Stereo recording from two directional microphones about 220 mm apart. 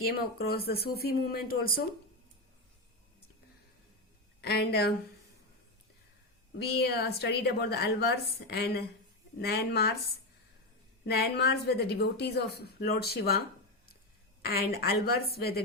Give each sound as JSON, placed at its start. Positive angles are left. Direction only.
{"t": 0.1, "sound": "speech", "side_deg": 45}
{"t": 4.4, "sound": "a woman's voice", "side_deg": 45}
{"t": 6.6, "sound": "speech", "side_deg": 45}
{"t": 11.0, "sound": "speech", "side_deg": 45}
{"t": 14.4, "sound": "speech", "side_deg": 45}